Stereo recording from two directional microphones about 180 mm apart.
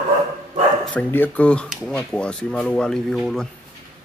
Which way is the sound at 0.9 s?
10° left (ahead or behind).